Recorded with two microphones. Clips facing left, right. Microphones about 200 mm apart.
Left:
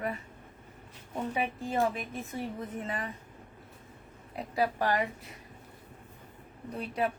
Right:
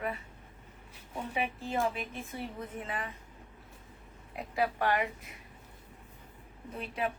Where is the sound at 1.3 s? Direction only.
40° left (ahead or behind).